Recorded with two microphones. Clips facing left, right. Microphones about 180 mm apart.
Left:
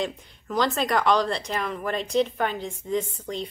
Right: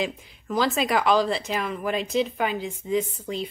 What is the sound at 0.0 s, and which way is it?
Speech, 5° right (ahead or behind).